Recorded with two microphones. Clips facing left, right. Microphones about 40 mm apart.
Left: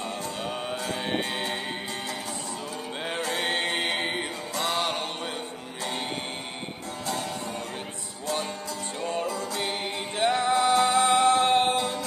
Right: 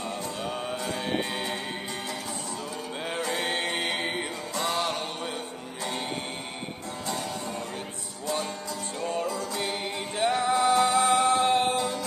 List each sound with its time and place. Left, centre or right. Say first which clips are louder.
0.4 s mantra: even; centre
3.3 s music: left 4 dB; centre
9.0 s music: even; centre
9.6 s music: left 1 dB; centre
10.3 s music: even; centre
10.9 s music: left 1 dB; centre